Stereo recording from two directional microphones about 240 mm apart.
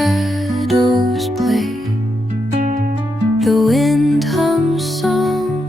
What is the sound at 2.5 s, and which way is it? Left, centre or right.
Music, right.